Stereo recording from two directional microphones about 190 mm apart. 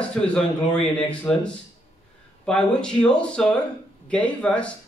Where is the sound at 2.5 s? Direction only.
5° left (ahead or behind).